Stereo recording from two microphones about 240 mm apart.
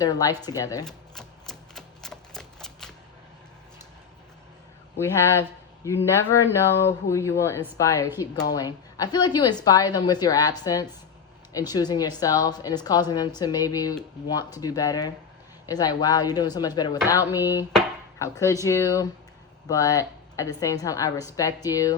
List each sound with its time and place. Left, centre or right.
0.0 s a woman's voice: centre
0.9 s typewriter: centre
4.9 s a woman's voice: centre